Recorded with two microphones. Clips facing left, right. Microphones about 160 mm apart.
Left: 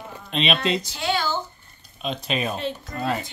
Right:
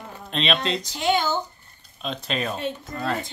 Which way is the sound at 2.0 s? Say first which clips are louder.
Left 2 dB; 5° left (ahead or behind).